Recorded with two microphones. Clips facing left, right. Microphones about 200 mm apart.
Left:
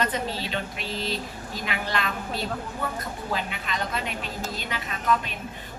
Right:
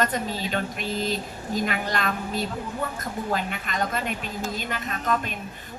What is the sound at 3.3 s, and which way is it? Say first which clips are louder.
A woman's voice: right 1 dB; 50° right (ahead or behind).